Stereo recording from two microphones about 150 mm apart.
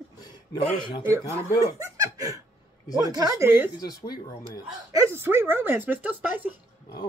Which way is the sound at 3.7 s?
25° left (ahead or behind).